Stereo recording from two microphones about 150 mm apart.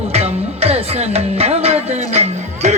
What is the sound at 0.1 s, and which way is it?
Music, 45° right (ahead or behind).